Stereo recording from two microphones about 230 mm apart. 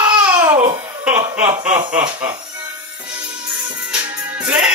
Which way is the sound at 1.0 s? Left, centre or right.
Centre.